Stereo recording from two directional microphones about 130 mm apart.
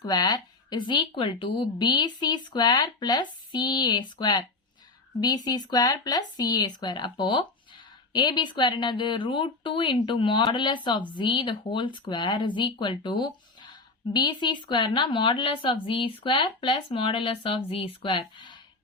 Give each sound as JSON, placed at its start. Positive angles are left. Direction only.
{"t": 0.0, "sound": "a woman's voice", "side_deg": 30}